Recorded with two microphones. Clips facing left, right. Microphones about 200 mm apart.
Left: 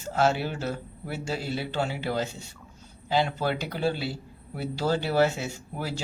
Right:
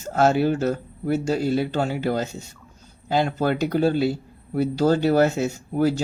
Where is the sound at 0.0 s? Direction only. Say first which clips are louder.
Right 6 dB; 45° right (ahead or behind).